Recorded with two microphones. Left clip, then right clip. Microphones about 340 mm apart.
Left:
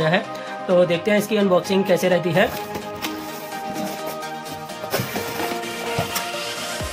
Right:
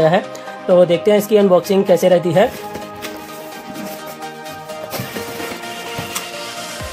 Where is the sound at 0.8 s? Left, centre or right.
Right.